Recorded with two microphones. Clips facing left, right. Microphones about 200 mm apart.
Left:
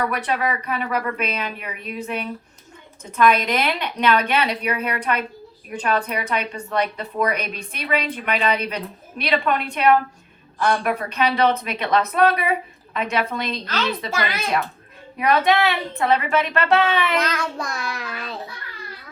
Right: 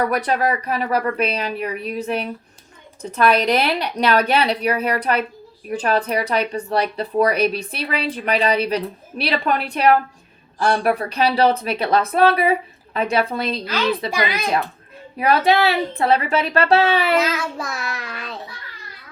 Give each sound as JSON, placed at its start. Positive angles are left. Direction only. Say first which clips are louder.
{"t": 0.1, "sound": "speech", "louder": "right 4 dB", "side_deg": -40}
{"t": 14.1, "sound": "speech", "louder": "right 3 dB", "side_deg": -15}
{"t": 15.2, "sound": "speech", "louder": "right 2 dB", "side_deg": -30}
{"t": 17.2, "sound": "a child's voice", "louder": "right 3 dB", "side_deg": -5}